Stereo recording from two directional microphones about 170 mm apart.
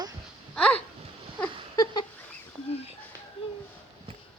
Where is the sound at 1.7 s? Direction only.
25° left (ahead or behind).